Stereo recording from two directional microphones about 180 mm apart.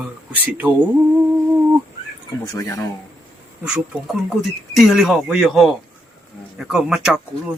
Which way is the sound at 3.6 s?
5° right (ahead or behind).